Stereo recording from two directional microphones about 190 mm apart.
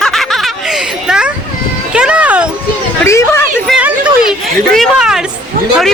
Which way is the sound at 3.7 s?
5° right (ahead or behind).